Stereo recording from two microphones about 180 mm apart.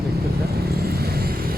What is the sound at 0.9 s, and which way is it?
Vehicle, 60° right (ahead or behind).